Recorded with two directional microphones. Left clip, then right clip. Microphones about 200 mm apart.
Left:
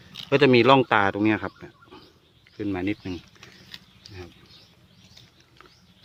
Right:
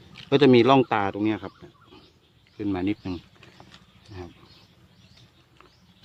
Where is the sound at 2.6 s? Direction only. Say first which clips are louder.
Right 1 dB; 15° right (ahead or behind).